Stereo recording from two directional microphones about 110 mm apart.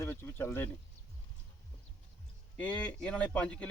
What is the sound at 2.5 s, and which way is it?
Speech, 10° left (ahead or behind).